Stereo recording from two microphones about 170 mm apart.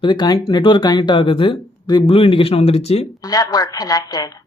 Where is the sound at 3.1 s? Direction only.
20° left (ahead or behind).